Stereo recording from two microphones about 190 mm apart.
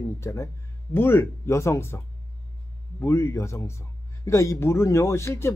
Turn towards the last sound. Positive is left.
turn(degrees=15)  # may be behind; listen again after turning